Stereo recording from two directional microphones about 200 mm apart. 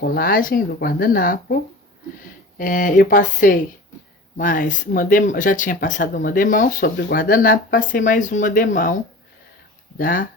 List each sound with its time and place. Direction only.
0.0 s speech: 45° left (ahead or behind)
2.6 s speech: 45° left (ahead or behind)
10.0 s speech: 45° left (ahead or behind)